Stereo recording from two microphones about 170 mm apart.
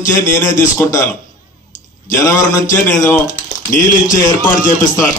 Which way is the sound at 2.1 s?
15° left (ahead or behind).